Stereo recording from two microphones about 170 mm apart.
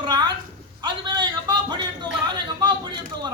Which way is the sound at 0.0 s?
25° right (ahead or behind).